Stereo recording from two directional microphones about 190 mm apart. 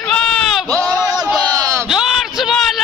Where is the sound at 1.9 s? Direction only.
Centre (ahead or behind).